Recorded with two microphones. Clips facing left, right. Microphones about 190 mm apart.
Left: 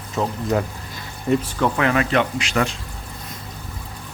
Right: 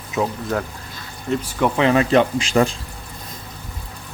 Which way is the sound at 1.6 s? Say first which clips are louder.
Right 3 dB; 25° right (ahead or behind).